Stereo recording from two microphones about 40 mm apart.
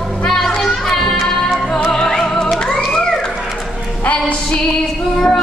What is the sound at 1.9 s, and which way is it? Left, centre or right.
Music, centre.